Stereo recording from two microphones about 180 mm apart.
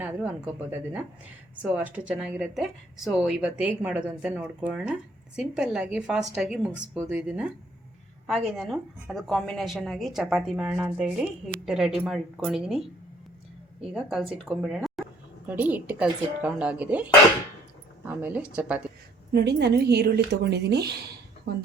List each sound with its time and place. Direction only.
0.0 s a woman's voice: 10° right (ahead or behind)
13.9 s a woman's voice: centre (ahead or behind)
19.3 s speech: 65° right (ahead or behind)